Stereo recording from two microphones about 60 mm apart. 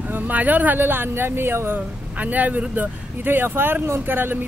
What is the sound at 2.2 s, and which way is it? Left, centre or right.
Speech, right.